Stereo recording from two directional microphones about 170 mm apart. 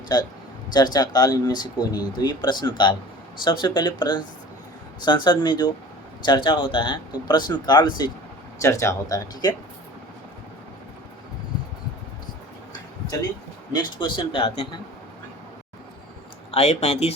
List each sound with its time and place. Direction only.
0.1 s speech: 25° left (ahead or behind)
13.7 s speech: 25° left (ahead or behind)
16.5 s speech: 40° left (ahead or behind)